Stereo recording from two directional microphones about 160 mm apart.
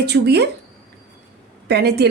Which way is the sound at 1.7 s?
90° right.